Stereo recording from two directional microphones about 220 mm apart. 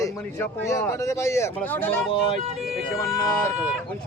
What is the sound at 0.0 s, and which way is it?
Speech, 10° left (ahead or behind).